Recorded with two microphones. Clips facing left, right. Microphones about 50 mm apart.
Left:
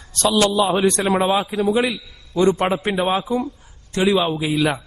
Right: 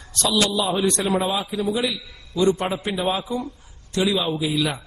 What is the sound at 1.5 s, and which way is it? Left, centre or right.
Speech, left.